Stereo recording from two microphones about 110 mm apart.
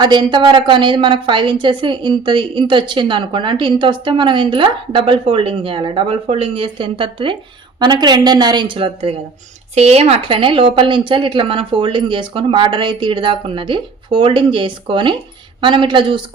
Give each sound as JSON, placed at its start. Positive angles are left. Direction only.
{"t": 0.0, "sound": "a woman's voice", "side_deg": -45}
{"t": 7.8, "sound": "a woman's voice", "side_deg": -40}
{"t": 9.7, "sound": "a woman's voice", "side_deg": -75}